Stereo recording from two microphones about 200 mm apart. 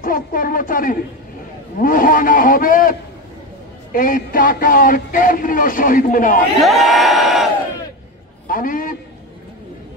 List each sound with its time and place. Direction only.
0.0 s a man's voice: 45° left (ahead or behind)
6.6 s crowd: centre (ahead or behind)
8.5 s a man's voice: 45° left (ahead or behind)